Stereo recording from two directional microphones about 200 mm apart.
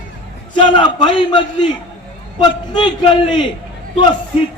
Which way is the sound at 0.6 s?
25° left (ahead or behind).